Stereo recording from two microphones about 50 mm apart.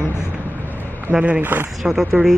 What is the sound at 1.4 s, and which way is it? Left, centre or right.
Speech, right.